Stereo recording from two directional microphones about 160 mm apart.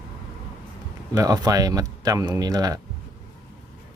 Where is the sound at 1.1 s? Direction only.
25° right (ahead or behind).